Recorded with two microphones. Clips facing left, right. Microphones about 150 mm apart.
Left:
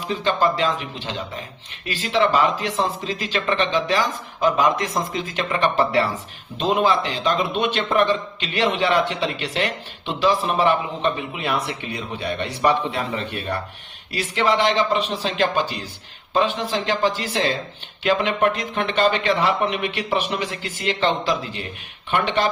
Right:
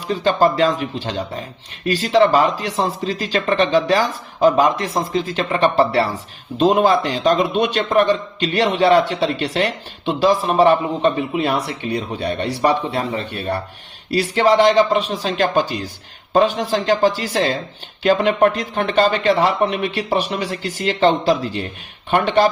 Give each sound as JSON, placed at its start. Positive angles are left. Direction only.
{"t": 0.1, "sound": "speech", "side_deg": -40}